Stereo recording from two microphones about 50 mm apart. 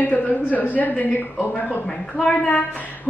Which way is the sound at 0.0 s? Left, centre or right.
Left.